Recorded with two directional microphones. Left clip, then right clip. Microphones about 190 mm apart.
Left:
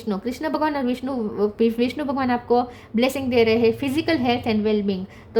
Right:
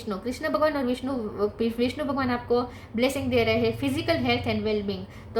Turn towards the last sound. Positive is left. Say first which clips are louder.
# left 7 dB
turn(degrees=45)  # may be behind; listen again after turning